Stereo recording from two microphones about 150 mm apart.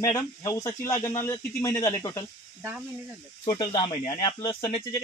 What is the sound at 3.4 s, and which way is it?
Speech, 30° left (ahead or behind).